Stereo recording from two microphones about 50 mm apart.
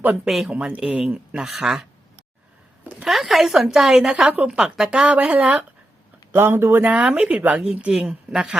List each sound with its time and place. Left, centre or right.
0.4 s a woman's voice: centre
1.5 s speech: centre
3.1 s a woman's voice: centre
5.2 s speech: right
6.3 s speech: right
6.8 s a woman's voice: right